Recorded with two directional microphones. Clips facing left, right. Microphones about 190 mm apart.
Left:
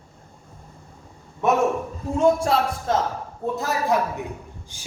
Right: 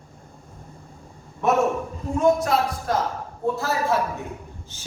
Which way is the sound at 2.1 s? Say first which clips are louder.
Left 1 dB; 30° left (ahead or behind).